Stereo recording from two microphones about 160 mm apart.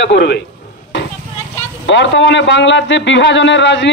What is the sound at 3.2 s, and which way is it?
Speech, 90° left.